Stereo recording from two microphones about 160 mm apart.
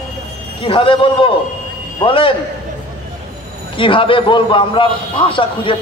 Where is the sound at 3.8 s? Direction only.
30° left (ahead or behind).